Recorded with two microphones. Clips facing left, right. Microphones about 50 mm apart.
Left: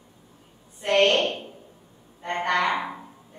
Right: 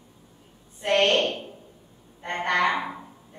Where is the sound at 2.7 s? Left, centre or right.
Centre.